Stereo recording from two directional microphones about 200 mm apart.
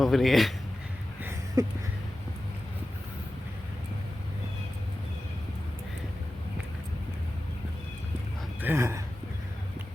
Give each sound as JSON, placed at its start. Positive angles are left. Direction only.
{"t": 0.0, "sound": "speech", "side_deg": 0}
{"t": 1.2, "sound": "a sound", "side_deg": -15}
{"t": 8.6, "sound": "speech", "side_deg": -10}